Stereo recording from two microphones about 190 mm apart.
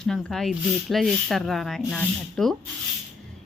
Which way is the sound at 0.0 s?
Centre (ahead or behind).